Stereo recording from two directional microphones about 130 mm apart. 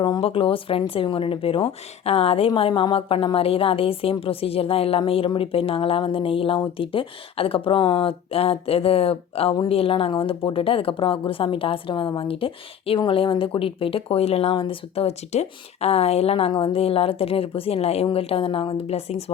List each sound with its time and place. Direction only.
0.0 s a woman's voice: 40° left (ahead or behind)